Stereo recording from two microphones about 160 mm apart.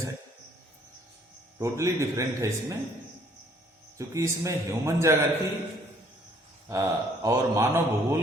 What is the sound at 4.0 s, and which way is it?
Speech, 20° right (ahead or behind).